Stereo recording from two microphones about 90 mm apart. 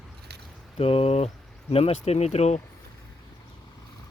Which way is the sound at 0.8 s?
90° left.